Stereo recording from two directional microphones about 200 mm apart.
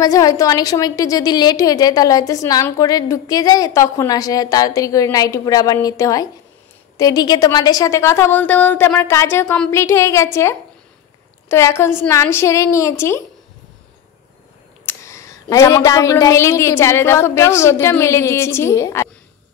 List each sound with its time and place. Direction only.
0.0 s a woman's voice: 15° left (ahead or behind)
14.9 s a woman's voice: 15° left (ahead or behind)